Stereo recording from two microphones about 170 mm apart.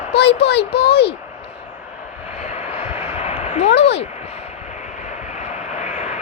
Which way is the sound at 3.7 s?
90° left.